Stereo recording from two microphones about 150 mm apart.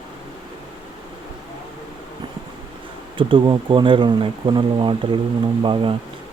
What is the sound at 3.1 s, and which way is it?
Speech, 35° right (ahead or behind).